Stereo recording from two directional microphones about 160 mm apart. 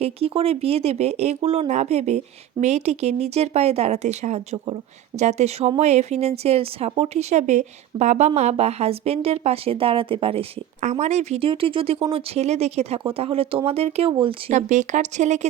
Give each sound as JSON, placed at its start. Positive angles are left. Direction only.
{"t": 0.0, "sound": "speech", "side_deg": -40}
{"t": 10.8, "sound": "speech", "side_deg": -45}
{"t": 14.5, "sound": "speech", "side_deg": -50}